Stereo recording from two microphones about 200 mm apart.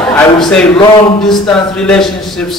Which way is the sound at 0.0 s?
5° left (ahead or behind).